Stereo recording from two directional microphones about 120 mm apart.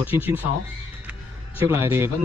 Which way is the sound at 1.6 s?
20° right (ahead or behind).